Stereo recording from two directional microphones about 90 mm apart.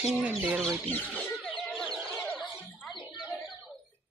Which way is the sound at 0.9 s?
20° left (ahead or behind).